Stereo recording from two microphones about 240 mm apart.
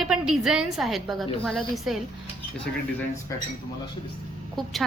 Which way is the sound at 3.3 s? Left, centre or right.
Centre.